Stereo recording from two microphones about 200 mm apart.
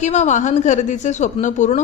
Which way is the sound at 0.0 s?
35° left (ahead or behind).